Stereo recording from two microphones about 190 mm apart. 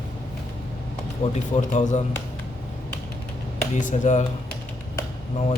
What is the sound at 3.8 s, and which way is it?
Speech, 40° left (ahead or behind).